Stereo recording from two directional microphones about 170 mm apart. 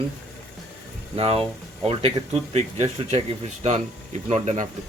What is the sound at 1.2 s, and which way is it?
Speech, 35° right (ahead or behind).